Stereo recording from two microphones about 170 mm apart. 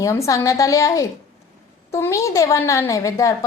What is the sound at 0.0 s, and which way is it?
A woman's voice, 20° left (ahead or behind).